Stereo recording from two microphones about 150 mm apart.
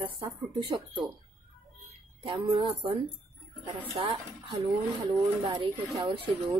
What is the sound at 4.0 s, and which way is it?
Speech, 30° right (ahead or behind).